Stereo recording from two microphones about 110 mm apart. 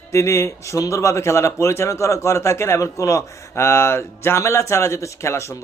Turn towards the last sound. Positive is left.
turn(degrees=25)  # may be behind; listen again after turning